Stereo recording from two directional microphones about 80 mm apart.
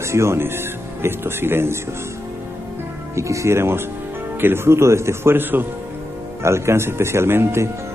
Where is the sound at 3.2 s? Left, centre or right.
Right.